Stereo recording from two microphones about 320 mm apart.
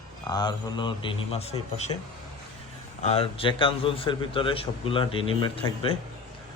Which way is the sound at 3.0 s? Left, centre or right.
Centre.